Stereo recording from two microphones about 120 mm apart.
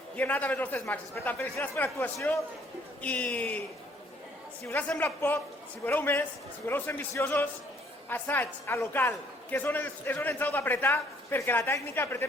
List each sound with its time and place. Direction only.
0.2 s a woman's voice: 15° left (ahead or behind)
4.6 s a woman's voice: 15° left (ahead or behind)